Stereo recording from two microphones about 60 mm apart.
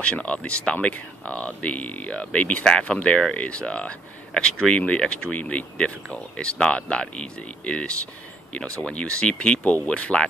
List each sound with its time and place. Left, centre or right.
0.0 s speech: centre